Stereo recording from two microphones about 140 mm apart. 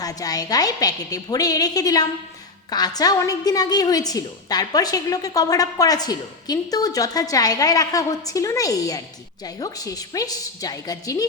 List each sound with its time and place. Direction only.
0.0 s a woman's voice: 25° left (ahead or behind)